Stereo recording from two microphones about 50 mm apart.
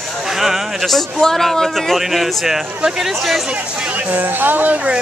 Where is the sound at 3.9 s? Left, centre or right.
Right.